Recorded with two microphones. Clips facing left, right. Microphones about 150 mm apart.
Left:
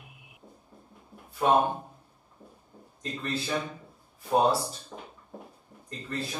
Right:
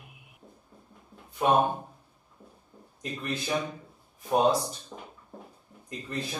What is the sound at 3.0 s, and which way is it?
Speech, 15° right (ahead or behind).